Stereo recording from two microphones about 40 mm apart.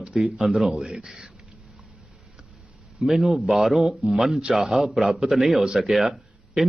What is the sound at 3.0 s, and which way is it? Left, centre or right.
A man's voice, centre.